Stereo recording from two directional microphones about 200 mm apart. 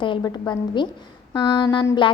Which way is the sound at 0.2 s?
15° left (ahead or behind).